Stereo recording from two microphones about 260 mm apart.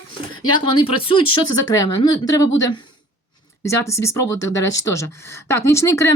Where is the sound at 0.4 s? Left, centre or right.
Centre.